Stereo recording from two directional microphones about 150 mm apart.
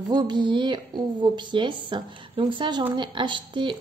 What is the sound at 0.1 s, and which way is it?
A woman's voice, 30° right (ahead or behind).